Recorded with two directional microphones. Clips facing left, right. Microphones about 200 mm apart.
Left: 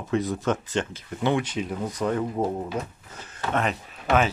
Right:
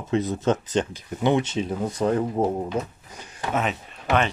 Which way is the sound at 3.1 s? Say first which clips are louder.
Even; 15° right (ahead or behind).